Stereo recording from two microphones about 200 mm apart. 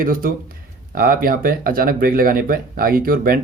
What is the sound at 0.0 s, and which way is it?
Speech, 45° right (ahead or behind).